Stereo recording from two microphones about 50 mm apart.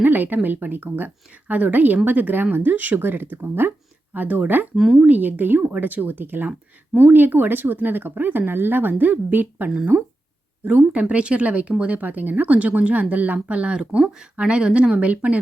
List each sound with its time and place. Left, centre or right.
0.0 s speech: right
4.1 s speech: right
4.7 s speech: centre
5.0 s speech: right
9.6 s speech: right
14.0 s speech: centre
14.3 s speech: right